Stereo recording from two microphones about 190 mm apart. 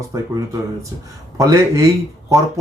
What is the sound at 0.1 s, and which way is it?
Speech, 15° right (ahead or behind).